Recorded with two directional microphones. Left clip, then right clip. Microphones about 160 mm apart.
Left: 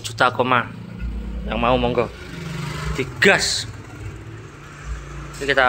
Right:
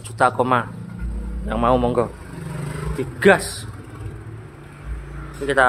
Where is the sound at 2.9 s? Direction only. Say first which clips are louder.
Even; 10° right (ahead or behind).